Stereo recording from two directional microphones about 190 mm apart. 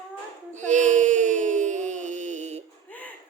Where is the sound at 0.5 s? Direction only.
40° right (ahead or behind).